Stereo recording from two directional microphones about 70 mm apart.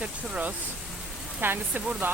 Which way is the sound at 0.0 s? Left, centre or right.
Centre.